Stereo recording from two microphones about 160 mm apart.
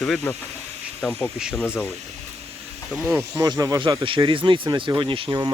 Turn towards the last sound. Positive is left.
turn(degrees=-25)  # may be behind; listen again after turning